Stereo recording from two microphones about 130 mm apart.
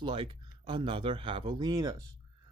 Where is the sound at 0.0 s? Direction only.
40° right (ahead or behind).